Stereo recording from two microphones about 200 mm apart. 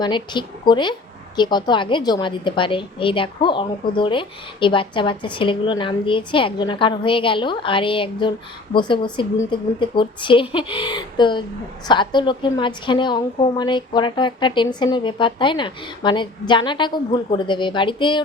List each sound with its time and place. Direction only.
0.0 s a woman's voice: 20° left (ahead or behind)